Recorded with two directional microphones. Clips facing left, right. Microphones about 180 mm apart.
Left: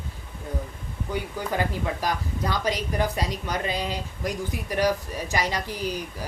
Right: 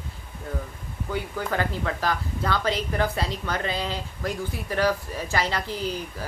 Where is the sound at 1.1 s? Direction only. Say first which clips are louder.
Even; 15° left (ahead or behind).